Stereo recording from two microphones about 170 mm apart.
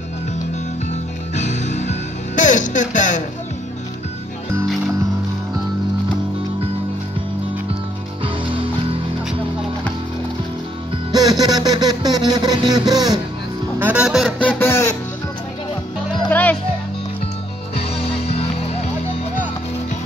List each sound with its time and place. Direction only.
1.3 s music: 40° left (ahead or behind)
11.1 s music: 25° right (ahead or behind)
13.7 s music: 10° right (ahead or behind)
14.6 s music: 15° left (ahead or behind)
16.3 s music: 10° left (ahead or behind)
17.7 s music: 35° left (ahead or behind)